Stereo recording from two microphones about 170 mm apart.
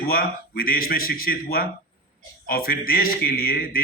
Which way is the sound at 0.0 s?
60° left (ahead or behind).